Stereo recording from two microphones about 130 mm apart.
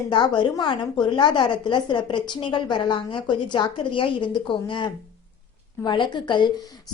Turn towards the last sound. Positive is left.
turn(degrees=35)  # may be behind; listen again after turning